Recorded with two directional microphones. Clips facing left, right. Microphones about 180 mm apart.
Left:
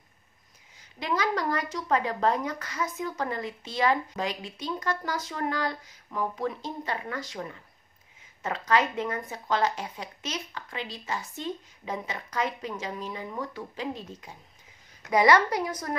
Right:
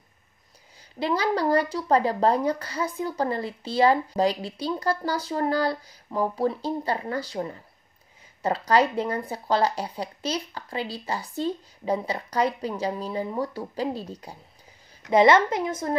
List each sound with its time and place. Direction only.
0.9 s a woman's voice: 30° right (ahead or behind)